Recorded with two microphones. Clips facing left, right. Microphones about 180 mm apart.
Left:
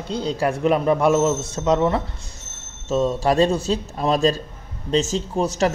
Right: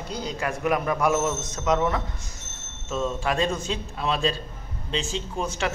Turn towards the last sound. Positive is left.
turn(degrees=40)  # may be behind; listen again after turning